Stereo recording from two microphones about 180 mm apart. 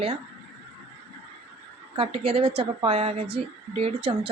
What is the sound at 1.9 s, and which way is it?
Speech, 30° right (ahead or behind).